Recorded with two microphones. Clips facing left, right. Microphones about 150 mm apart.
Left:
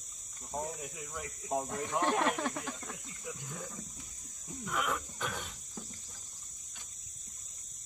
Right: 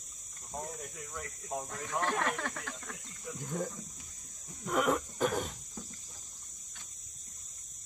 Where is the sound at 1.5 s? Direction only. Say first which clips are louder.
Left 4 dB; 25° left (ahead or behind); by 3.3 s 5° left (ahead or behind).